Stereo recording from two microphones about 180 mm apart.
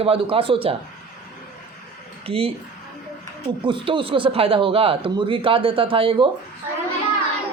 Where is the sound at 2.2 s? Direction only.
30° right (ahead or behind).